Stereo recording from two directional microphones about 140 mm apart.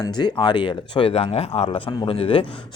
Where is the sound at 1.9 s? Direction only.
35° left (ahead or behind).